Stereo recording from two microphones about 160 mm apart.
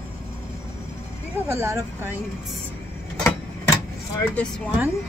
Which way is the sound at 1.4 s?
15° right (ahead or behind).